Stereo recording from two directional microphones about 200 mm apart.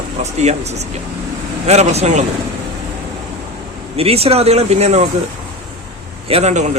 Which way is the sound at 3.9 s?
30° right (ahead or behind).